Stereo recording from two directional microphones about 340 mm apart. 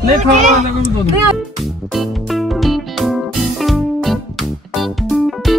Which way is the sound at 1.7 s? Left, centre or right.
Centre.